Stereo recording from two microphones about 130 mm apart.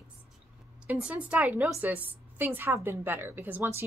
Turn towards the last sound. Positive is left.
turn(degrees=-15)  # may be behind; listen again after turning